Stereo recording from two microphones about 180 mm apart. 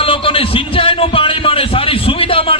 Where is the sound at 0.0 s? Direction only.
30° left (ahead or behind).